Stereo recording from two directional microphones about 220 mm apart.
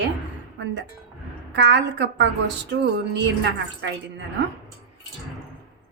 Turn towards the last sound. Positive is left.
turn(degrees=-50)  # may be behind; listen again after turning